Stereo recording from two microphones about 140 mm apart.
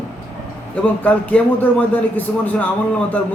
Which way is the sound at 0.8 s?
10° left (ahead or behind).